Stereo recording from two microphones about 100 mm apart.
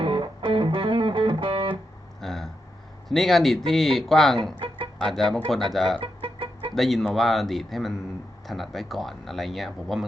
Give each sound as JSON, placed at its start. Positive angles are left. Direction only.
{"t": 0.0, "sound": "music", "side_deg": -55}
{"t": 2.2, "sound": "a sound", "side_deg": 0}
{"t": 3.1, "sound": "speech", "side_deg": 0}
{"t": 6.0, "sound": "music", "side_deg": -55}
{"t": 6.7, "sound": "speech", "side_deg": 0}